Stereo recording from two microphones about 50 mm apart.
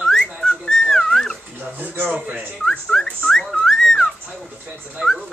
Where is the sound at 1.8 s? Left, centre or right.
Right.